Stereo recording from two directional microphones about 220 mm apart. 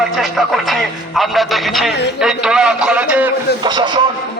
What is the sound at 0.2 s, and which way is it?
Speech, centre (ahead or behind).